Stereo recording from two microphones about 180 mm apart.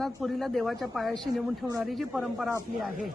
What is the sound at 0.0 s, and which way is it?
Speech, centre (ahead or behind).